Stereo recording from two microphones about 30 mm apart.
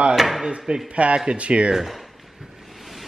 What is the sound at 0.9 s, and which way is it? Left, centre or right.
Speech, right.